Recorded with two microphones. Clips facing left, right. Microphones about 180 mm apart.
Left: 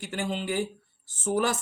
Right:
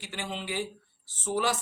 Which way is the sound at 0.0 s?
45° left (ahead or behind).